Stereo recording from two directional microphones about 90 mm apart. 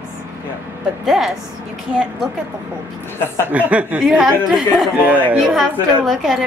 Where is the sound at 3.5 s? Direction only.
15° right (ahead or behind).